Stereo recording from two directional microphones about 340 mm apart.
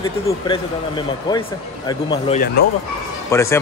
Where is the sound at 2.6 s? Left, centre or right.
Left.